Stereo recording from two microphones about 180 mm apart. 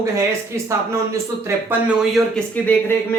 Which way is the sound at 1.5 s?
5° right (ahead or behind).